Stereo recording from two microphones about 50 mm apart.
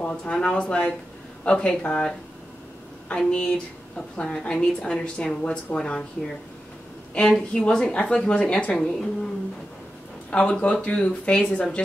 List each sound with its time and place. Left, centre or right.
0.0 s a woman's voice: left
3.3 s a woman's voice: left
7.2 s a woman's voice: centre
10.3 s speech: left